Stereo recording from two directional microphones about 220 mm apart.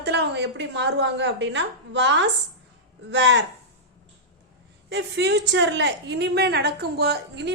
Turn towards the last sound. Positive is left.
turn(degrees=-50)  # may be behind; listen again after turning